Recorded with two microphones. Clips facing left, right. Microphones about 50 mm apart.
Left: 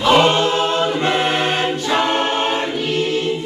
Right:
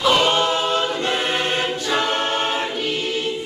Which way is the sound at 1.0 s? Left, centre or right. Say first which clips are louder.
Left 4 dB; centre.